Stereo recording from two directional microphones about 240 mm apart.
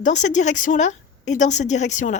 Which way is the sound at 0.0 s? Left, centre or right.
Left.